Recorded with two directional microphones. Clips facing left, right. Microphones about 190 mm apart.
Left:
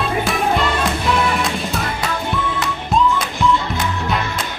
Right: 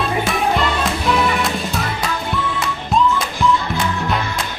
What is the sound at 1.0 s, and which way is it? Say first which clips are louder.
Music: right 3 dB; centre (ahead or behind).